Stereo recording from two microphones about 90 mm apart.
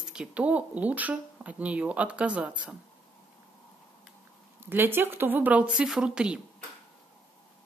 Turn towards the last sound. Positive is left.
turn(degrees=-10)  # may be behind; listen again after turning